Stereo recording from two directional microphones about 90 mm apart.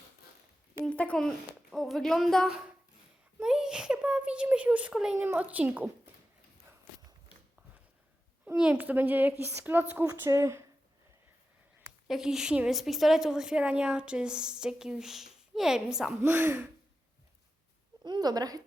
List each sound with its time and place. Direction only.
0.9 s speech: 15° left (ahead or behind)
2.5 s a woman's voice: 10° right (ahead or behind)
5.1 s a woman's voice: 25° right (ahead or behind)
8.7 s a woman's voice: 20° right (ahead or behind)
10.1 s a woman's voice: 35° right (ahead or behind)
12.0 s a woman's voice: 5° right (ahead or behind)
16.2 s a woman's voice: 25° right (ahead or behind)
18.0 s a woman's voice: 50° right (ahead or behind)